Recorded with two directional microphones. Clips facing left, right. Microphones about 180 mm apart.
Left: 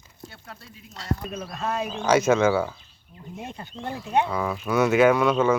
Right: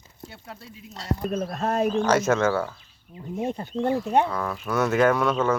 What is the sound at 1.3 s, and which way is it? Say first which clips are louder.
Speech: right 4 dB; 50° right (ahead or behind).